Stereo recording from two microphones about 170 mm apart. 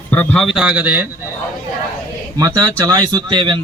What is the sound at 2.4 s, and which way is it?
Speech, 20° right (ahead or behind).